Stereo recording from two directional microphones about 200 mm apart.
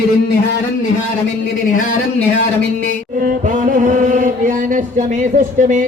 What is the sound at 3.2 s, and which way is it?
Chant, 40° right (ahead or behind).